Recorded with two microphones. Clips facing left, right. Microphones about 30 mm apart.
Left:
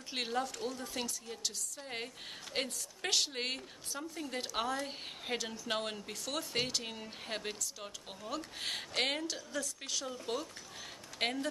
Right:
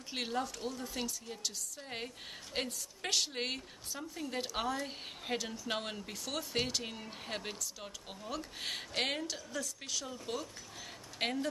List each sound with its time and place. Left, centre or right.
0.1 s a woman's voice: centre
10.1 s speech: centre
11.1 s speech: centre